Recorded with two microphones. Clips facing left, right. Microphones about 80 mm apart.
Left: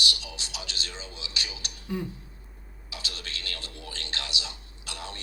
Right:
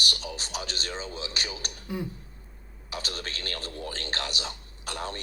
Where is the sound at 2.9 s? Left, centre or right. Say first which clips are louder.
Right 4 dB; right.